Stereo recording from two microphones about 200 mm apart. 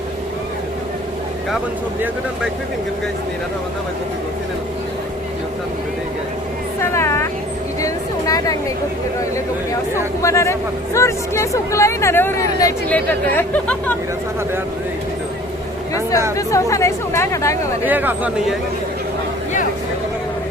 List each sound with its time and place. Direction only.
6.7 s vehicle: 15° left (ahead or behind)
7.8 s a sound: 15° left (ahead or behind)
9.9 s speech: 15° left (ahead or behind)
16.3 s speech: 15° left (ahead or behind)
17.8 s speech: 10° right (ahead or behind)